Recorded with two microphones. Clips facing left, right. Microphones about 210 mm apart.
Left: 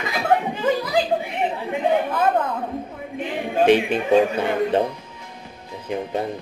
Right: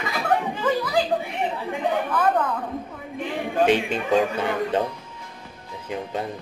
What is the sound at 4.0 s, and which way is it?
Speech, 20° left (ahead or behind).